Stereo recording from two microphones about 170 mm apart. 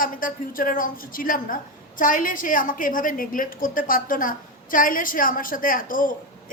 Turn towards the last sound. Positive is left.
turn(degrees=55)  # may be behind; listen again after turning